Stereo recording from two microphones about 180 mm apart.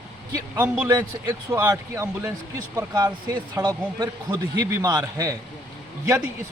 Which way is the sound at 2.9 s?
25° right (ahead or behind).